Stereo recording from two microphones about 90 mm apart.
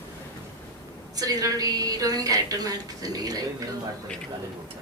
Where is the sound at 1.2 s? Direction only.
45° right (ahead or behind).